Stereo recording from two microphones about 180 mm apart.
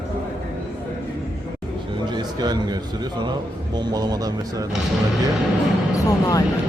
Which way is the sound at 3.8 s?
20° right (ahead or behind).